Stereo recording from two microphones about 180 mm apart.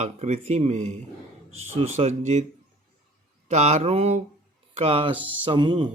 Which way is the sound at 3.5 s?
40° right (ahead or behind).